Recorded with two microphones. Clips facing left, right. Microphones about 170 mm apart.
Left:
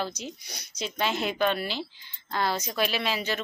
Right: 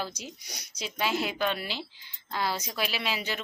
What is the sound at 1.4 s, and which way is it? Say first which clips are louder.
Speech: left 4 dB; 50° left (ahead or behind).